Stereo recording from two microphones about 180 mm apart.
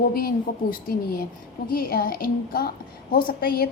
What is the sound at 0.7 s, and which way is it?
A woman's voice, 55° left (ahead or behind).